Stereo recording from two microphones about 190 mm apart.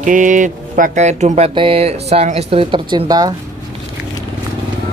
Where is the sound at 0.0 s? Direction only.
45° right (ahead or behind); by 3.3 s 20° right (ahead or behind).